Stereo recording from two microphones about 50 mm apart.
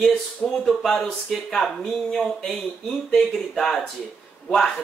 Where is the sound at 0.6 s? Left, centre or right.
Centre.